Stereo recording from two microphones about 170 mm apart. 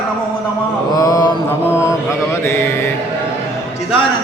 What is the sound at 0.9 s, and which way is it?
Mantra, 20° left (ahead or behind).